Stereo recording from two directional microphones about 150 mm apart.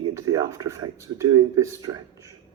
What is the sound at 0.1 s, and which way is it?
Speech, 20° right (ahead or behind).